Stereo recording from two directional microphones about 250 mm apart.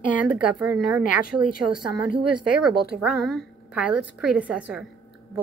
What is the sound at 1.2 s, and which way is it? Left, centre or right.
Speech, left.